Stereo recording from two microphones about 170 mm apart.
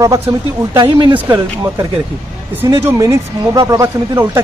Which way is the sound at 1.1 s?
10° right (ahead or behind).